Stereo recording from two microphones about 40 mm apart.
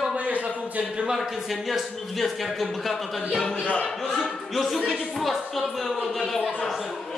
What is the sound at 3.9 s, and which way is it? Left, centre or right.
A man's voice, centre.